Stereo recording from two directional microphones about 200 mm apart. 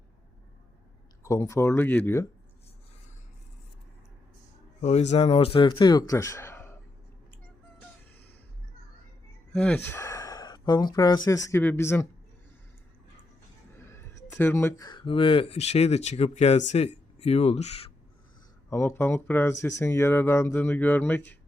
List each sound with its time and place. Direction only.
1.2 s speech: 15° left (ahead or behind)
4.8 s speech: 35° left (ahead or behind); by 6.7 s 10° left (ahead or behind)
9.5 s speech: 5° left (ahead or behind)
13.9 s speech: 10° left (ahead or behind); by 17.9 s 30° left (ahead or behind)
18.7 s speech: 15° left (ahead or behind)